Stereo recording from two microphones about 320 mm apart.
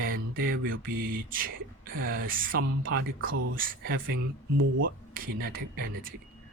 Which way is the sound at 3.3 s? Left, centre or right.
Right.